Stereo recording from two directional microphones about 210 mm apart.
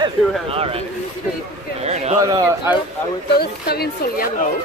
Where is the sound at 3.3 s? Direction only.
50° left (ahead or behind).